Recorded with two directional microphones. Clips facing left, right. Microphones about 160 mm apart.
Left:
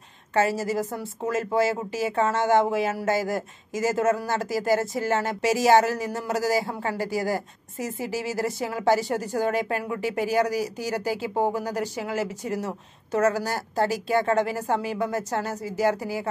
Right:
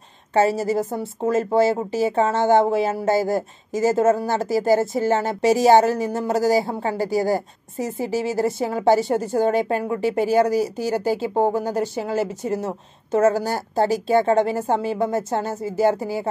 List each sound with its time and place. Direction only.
0.3 s speech: 30° right (ahead or behind)